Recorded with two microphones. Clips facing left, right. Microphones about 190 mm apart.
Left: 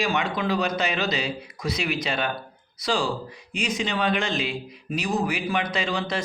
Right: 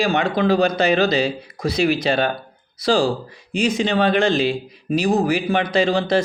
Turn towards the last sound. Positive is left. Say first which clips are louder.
# right 10 dB
turn(degrees=-30)  # may be behind; listen again after turning